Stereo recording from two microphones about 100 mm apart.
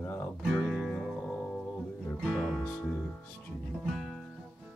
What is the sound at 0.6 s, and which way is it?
Music, 5° left (ahead or behind).